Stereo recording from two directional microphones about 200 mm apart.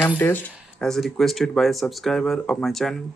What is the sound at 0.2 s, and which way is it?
Speech, 5° left (ahead or behind).